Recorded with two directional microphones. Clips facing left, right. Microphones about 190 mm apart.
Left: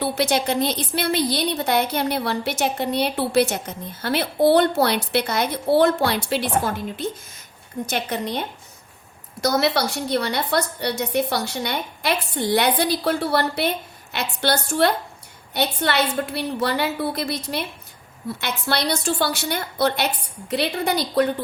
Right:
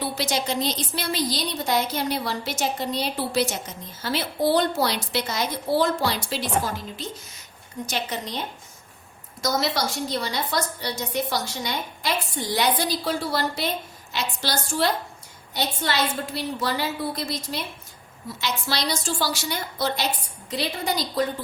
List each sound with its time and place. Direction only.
0.0 s a woman's voice: 60° left (ahead or behind)